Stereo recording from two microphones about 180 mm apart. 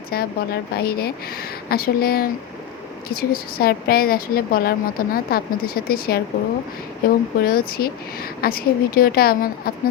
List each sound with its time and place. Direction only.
0.1 s a woman's voice: 60° left (ahead or behind)